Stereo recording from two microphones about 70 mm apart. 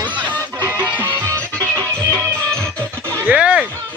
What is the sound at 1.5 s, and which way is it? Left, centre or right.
Music, centre.